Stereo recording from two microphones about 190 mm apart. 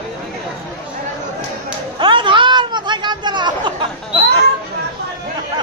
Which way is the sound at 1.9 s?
25° right (ahead or behind).